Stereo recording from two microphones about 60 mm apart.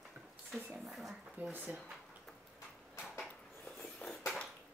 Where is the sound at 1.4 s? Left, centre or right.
Right.